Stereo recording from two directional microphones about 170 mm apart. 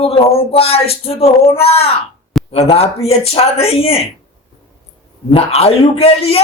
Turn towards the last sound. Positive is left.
turn(degrees=35)  # may be behind; listen again after turning